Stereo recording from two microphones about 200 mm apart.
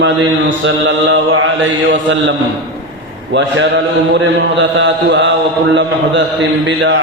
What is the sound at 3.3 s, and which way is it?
A man's voice, 65° right (ahead or behind).